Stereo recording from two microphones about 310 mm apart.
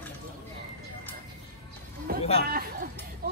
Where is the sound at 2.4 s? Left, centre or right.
Right.